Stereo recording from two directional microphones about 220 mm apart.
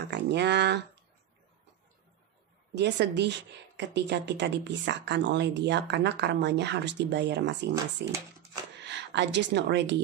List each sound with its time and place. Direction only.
0.1 s speech: 50° right (ahead or behind)
2.7 s speech: 50° right (ahead or behind)